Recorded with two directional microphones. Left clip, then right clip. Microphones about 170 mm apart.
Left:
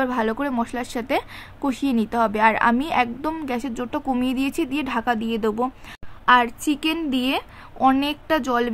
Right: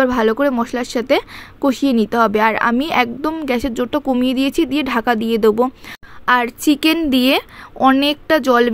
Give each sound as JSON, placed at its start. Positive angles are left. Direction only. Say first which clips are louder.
{"t": 0.0, "sound": "speech", "louder": "right 8 dB", "side_deg": -25}